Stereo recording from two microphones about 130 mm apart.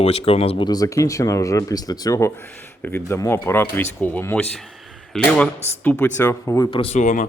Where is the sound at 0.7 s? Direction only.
25° left (ahead or behind).